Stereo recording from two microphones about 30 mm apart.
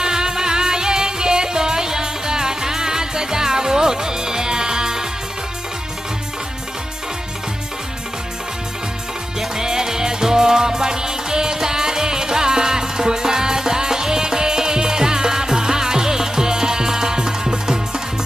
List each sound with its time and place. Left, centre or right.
0.0 s music: right
9.6 s music: centre